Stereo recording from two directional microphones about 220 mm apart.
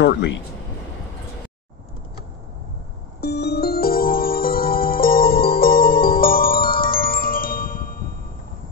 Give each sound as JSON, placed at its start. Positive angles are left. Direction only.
{"t": 3.2, "sound": "music", "side_deg": 50}